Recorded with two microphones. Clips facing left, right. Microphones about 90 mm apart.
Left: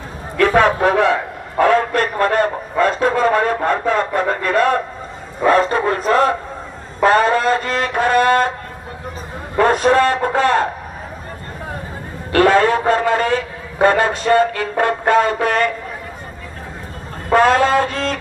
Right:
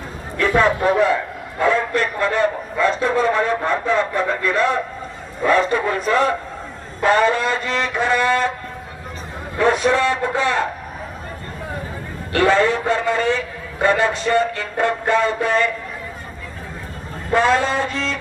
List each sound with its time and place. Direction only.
0.3 s a man's voice: 60° left (ahead or behind)
5.5 s music: 45° left (ahead or behind)
9.6 s music: 50° left (ahead or behind)
12.3 s a man's voice: 55° left (ahead or behind)
17.3 s a man's voice: 55° left (ahead or behind)